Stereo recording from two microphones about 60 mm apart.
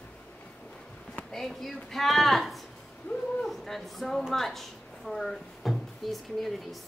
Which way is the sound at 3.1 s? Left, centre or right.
Left.